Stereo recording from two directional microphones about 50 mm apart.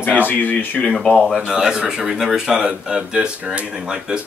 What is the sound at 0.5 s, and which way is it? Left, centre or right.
Speech, left.